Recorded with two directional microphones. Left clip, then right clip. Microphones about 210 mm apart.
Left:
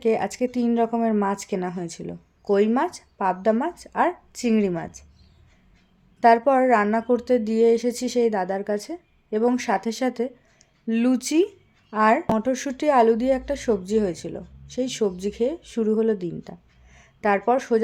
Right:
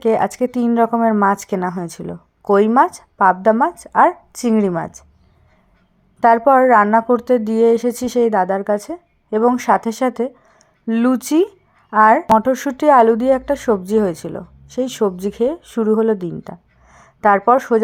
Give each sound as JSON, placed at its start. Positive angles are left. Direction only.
{"t": 0.0, "sound": "speech", "side_deg": -20}
{"t": 1.6, "sound": "a woman's voice", "side_deg": -5}
{"t": 1.9, "sound": "speech", "side_deg": -20}
{"t": 4.7, "sound": "a woman's voice", "side_deg": -10}
{"t": 6.1, "sound": "a woman's voice", "side_deg": -20}
{"t": 16.9, "sound": "a sound", "side_deg": -20}